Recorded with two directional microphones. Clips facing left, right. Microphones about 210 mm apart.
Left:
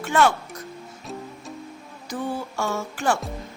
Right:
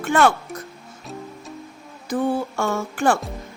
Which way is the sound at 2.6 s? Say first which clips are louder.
Right 4 dB; 55° right (ahead or behind).